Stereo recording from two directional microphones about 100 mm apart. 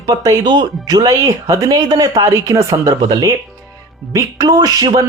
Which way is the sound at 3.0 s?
50° right (ahead or behind).